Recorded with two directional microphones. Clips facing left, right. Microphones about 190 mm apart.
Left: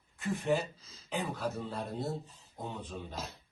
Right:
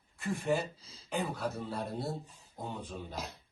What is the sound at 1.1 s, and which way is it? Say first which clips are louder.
Speech: even; centre (ahead or behind).